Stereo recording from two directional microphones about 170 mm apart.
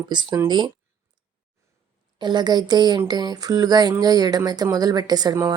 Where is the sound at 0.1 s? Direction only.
25° right (ahead or behind).